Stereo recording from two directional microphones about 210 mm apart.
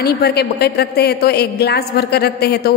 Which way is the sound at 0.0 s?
50° left (ahead or behind).